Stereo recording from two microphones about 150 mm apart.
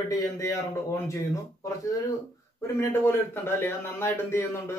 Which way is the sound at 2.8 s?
15° left (ahead or behind).